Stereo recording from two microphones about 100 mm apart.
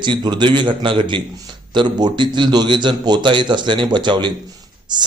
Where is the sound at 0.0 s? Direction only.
50° right (ahead or behind).